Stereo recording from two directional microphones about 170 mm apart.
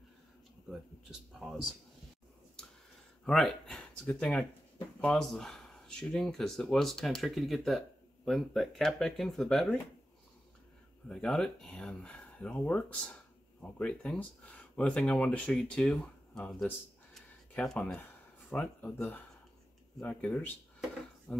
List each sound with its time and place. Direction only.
1.4 s speech: centre (ahead or behind)
3.3 s speech: centre (ahead or behind)
11.1 s speech: 5° left (ahead or behind)